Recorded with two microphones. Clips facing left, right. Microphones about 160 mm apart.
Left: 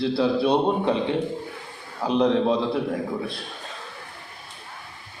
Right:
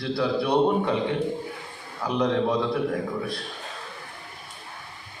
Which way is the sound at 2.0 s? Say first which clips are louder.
Left 3 dB; 25° left (ahead or behind).